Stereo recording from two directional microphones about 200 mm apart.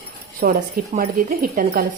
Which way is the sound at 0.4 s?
40° right (ahead or behind).